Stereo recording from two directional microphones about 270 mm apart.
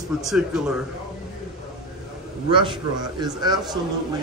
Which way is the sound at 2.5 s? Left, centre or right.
Centre.